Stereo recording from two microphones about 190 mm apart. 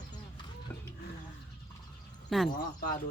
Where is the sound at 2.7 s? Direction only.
50° left (ahead or behind).